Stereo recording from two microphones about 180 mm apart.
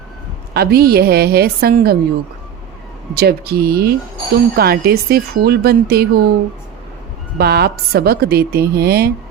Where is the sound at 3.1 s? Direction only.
60° right (ahead or behind).